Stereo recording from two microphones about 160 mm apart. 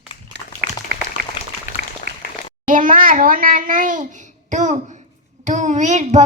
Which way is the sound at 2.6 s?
55° right (ahead or behind).